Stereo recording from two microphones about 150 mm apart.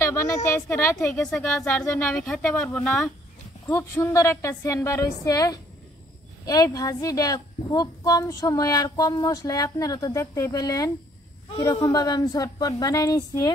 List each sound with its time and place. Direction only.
0.0 s a woman's voice: 20° left (ahead or behind)
1.2 s speech: centre (ahead or behind)
3.6 s a woman's voice: 15° left (ahead or behind)